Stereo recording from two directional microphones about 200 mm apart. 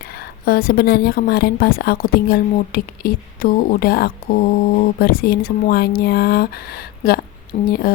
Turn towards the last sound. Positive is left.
turn(degrees=45)  # may be behind; listen again after turning